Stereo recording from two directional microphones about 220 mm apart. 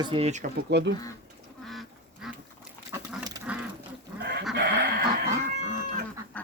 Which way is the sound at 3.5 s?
5° right (ahead or behind).